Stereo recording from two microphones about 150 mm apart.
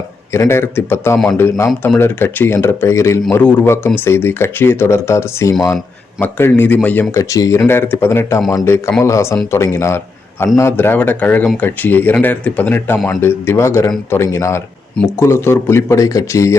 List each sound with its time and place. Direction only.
0.3 s speech: 15° left (ahead or behind)